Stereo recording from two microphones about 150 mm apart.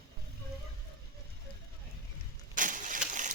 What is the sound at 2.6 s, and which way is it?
Vehicle, 60° right (ahead or behind).